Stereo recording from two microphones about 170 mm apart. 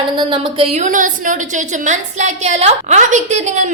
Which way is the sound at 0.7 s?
50° right (ahead or behind).